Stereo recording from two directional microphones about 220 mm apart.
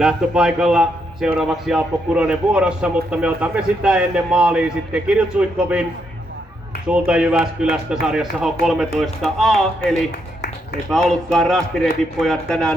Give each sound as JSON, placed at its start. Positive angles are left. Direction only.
{"t": 0.0, "sound": "a man's voice", "side_deg": -5}
{"t": 6.8, "sound": "a man's voice", "side_deg": -5}
{"t": 10.9, "sound": "a man's voice", "side_deg": 0}